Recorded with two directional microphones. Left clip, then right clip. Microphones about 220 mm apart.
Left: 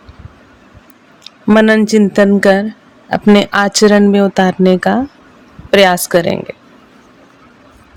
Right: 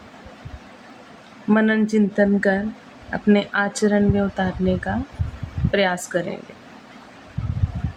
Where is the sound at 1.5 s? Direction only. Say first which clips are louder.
Left 10 dB; 55° left (ahead or behind).